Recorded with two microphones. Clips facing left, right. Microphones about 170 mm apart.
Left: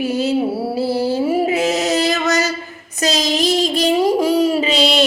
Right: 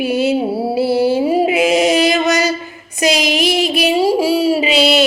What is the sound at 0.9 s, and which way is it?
Music, 15° right (ahead or behind).